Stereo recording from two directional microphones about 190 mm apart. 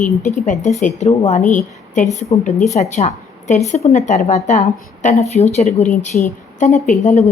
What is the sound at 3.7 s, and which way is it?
A woman's voice, 35° left (ahead or behind).